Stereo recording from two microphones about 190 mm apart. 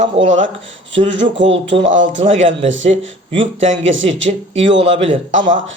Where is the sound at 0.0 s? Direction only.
40° right (ahead or behind).